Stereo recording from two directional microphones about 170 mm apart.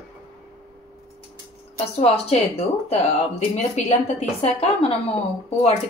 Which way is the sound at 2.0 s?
35° left (ahead or behind).